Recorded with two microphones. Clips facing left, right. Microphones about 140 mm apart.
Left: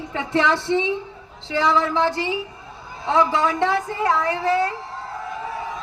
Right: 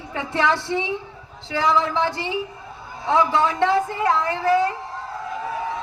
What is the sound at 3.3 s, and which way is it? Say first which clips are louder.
A woman's voice: right 1 dB; 15° left (ahead or behind).